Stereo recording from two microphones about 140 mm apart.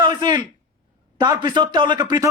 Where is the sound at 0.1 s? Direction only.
30° right (ahead or behind).